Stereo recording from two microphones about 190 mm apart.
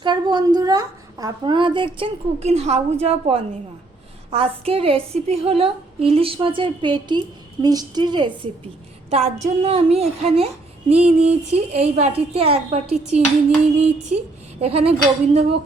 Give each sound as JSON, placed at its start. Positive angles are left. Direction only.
{"t": 0.0, "sound": "a woman's voice", "side_deg": -25}
{"t": 9.0, "sound": "a woman's voice", "side_deg": -35}
{"t": 14.6, "sound": "a woman's voice", "side_deg": -30}